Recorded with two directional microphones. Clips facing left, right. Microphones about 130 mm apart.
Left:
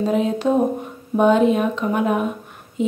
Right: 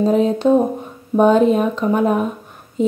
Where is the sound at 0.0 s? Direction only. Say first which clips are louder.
Right 4 dB; 35° right (ahead or behind).